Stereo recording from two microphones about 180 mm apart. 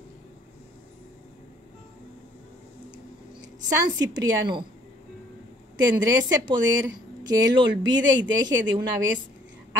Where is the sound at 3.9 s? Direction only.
20° right (ahead or behind).